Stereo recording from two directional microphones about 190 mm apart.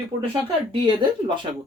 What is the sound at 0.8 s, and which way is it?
Speech, 25° right (ahead or behind).